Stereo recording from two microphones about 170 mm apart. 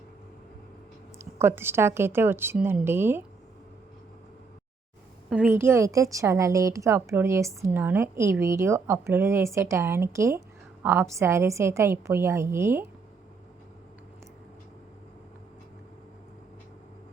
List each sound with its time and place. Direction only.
1.2 s a woman's voice: 15° right (ahead or behind)
5.3 s a woman's voice: 10° right (ahead or behind)